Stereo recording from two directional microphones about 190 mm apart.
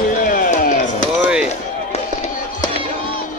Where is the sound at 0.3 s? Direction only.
45° left (ahead or behind).